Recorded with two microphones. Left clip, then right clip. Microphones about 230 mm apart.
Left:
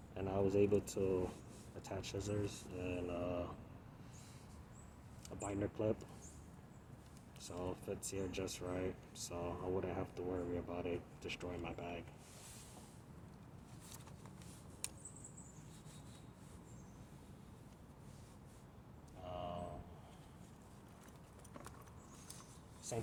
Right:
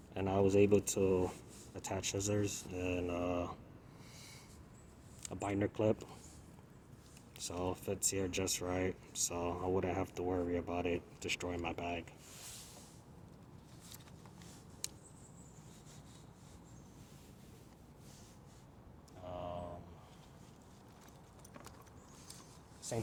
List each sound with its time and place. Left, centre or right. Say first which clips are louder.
0.1 s speech: right 5 dB; right
5.2 s speech: right 5 dB; right
7.3 s speech: right 6 dB; right
19.3 s a sound: right 2 dB; right